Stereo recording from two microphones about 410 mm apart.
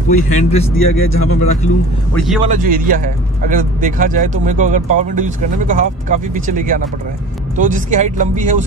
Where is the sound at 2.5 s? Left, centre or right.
Centre.